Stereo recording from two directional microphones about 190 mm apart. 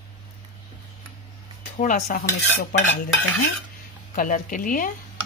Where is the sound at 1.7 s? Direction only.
40° left (ahead or behind).